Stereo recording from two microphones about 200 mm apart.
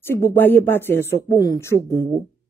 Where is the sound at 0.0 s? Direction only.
10° left (ahead or behind).